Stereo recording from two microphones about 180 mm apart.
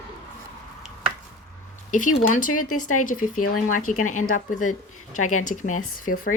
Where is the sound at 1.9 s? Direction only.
45° left (ahead or behind).